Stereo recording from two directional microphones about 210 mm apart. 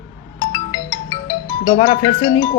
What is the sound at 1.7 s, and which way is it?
Speech, 25° left (ahead or behind).